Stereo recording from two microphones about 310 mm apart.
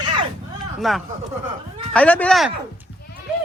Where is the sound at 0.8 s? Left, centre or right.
Centre.